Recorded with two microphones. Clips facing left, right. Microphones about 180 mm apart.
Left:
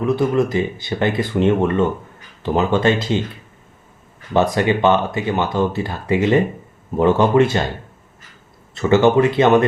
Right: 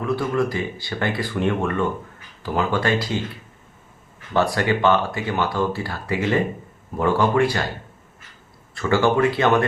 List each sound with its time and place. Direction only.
0.0 s speech: 20° left (ahead or behind)
4.4 s speech: 20° left (ahead or behind)
8.7 s speech: 20° left (ahead or behind)